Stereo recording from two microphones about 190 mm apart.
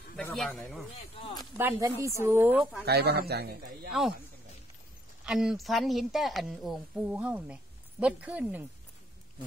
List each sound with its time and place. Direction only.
0.1 s speech: 5° left (ahead or behind)
1.2 s speech: 20° left (ahead or behind)
1.6 s speech: 10° right (ahead or behind)
2.8 s a man's voice: 55° right (ahead or behind)
5.2 s speech: 5° right (ahead or behind)